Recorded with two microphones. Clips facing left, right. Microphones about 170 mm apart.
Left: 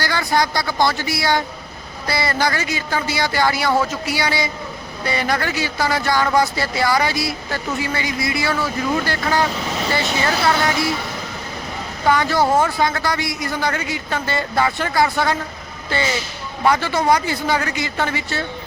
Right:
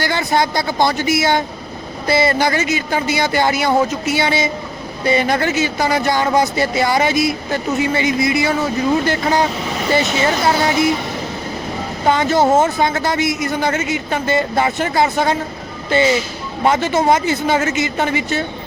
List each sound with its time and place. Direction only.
0.0 s speech: 20° right (ahead or behind)
12.0 s speech: 20° right (ahead or behind)